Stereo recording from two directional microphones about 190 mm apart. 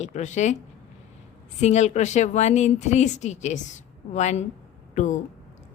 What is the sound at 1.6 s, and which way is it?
A woman's voice, 35° left (ahead or behind).